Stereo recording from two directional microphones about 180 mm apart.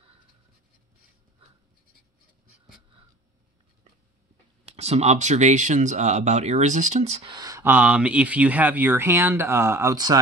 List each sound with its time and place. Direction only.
4.7 s speech: 35° right (ahead or behind)
7.2 s speech: 20° right (ahead or behind)